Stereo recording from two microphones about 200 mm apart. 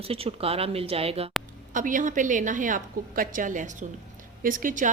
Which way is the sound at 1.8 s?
40° right (ahead or behind).